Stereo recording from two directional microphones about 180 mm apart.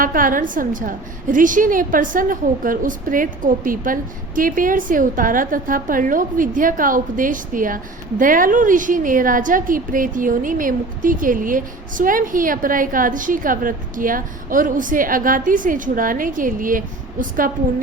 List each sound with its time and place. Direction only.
0.0 s a woman's voice: 50° right (ahead or behind)